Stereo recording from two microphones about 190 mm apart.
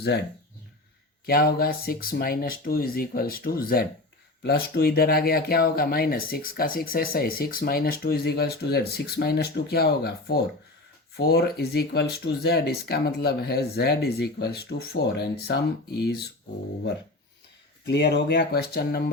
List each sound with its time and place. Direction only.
1.3 s speech: 55° left (ahead or behind)
17.8 s speech: 60° left (ahead or behind)